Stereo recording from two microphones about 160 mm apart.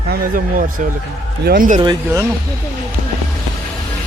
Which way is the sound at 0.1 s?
60° right (ahead or behind).